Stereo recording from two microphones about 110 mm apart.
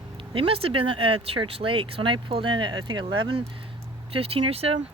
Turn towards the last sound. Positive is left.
turn(degrees=-65)  # may be behind; listen again after turning